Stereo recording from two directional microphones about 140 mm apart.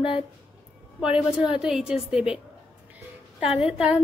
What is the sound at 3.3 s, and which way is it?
Speech, 5° right (ahead or behind).